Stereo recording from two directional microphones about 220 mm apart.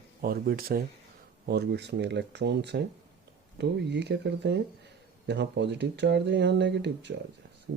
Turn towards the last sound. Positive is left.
turn(degrees=-55)  # may be behind; listen again after turning